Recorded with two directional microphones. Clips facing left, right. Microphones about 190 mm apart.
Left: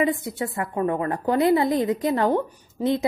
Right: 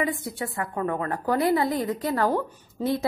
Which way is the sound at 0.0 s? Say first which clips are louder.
Left 4 dB; 20° left (ahead or behind).